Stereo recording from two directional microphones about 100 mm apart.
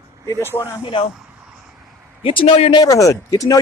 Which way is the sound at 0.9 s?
55° left (ahead or behind).